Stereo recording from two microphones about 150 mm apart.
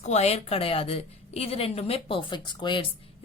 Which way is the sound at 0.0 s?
45° left (ahead or behind).